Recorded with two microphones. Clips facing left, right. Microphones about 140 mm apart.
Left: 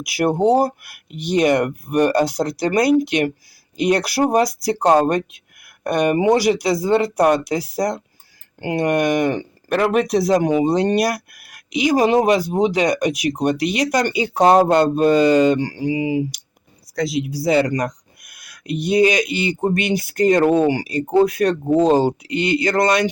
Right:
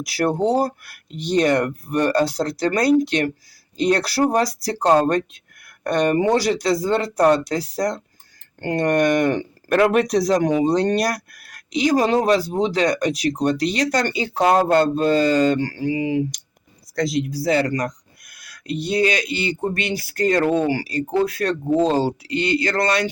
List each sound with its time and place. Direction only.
0.0 s speech: 15° left (ahead or behind)